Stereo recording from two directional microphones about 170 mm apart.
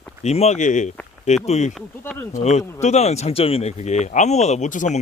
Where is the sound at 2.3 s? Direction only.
40° left (ahead or behind).